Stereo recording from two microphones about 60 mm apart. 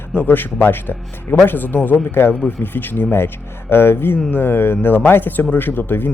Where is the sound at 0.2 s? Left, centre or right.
Left.